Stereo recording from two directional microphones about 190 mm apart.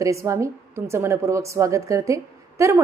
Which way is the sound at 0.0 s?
15° right (ahead or behind).